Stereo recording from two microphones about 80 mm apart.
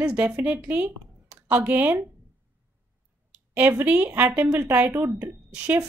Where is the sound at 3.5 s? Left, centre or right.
Right.